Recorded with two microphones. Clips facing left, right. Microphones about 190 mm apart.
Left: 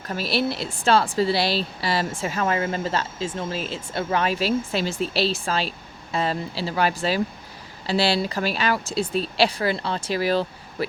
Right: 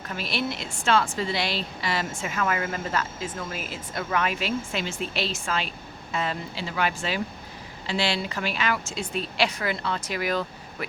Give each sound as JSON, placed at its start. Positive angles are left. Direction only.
{"t": 0.1, "sound": "speech", "side_deg": 35}